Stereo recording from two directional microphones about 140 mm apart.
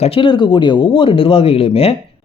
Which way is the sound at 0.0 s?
35° left (ahead or behind).